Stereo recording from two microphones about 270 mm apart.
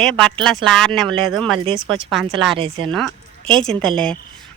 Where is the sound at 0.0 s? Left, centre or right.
Centre.